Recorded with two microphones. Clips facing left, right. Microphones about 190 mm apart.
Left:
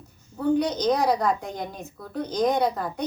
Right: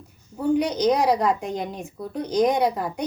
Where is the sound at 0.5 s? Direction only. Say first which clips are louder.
Right 3 dB; 10° right (ahead or behind).